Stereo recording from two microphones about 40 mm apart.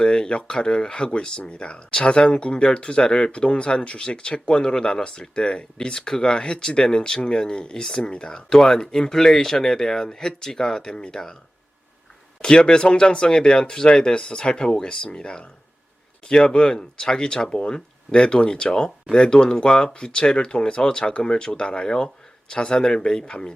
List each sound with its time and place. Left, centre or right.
0.0 s speech: centre
12.4 s speech: centre